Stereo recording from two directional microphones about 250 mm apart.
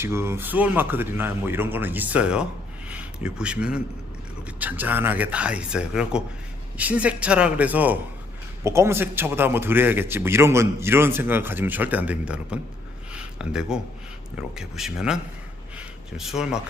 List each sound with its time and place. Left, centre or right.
0.0 s a man's voice: centre
13.1 s a sound: centre
14.5 s speech: centre